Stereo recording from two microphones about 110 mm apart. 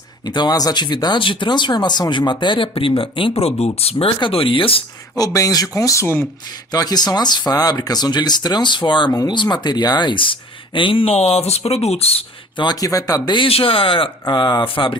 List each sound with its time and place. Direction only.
0.3 s speech: 40° left (ahead or behind); by 4.8 s 55° left (ahead or behind)
5.1 s speech: 35° left (ahead or behind)
6.7 s speech: 35° left (ahead or behind); by 12.2 s 65° left (ahead or behind)
12.5 s speech: 35° left (ahead or behind)
13.5 s speech: 55° left (ahead or behind)